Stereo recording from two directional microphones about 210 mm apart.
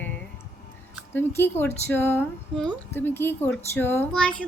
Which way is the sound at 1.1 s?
10° left (ahead or behind).